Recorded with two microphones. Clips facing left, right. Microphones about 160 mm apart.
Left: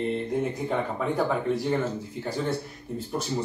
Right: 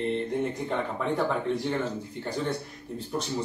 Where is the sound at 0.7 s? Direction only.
5° left (ahead or behind).